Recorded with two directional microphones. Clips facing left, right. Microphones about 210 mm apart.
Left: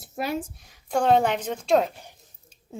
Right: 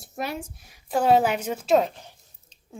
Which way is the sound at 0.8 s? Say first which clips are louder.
Right 1 dB; 5° right (ahead or behind).